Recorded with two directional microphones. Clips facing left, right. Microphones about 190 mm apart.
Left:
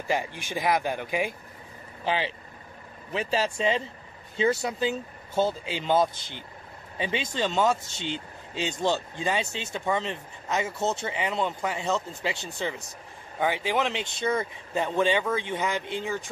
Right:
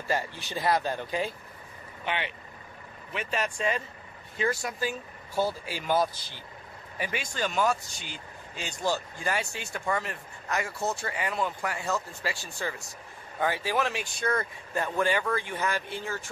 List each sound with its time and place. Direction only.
0.1 s speech: 15° left (ahead or behind)
2.0 s speech: 30° left (ahead or behind)